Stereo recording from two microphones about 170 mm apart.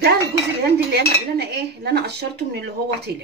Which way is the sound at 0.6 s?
75° right (ahead or behind).